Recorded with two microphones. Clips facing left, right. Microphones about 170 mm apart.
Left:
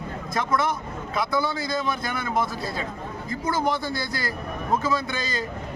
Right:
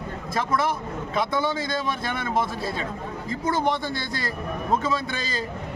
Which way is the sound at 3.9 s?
25° right (ahead or behind).